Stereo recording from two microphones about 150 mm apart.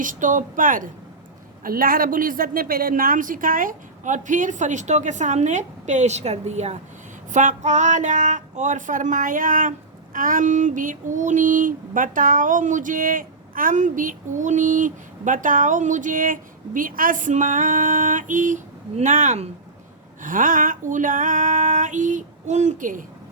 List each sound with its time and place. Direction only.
0.0 s female singing: 60° right (ahead or behind)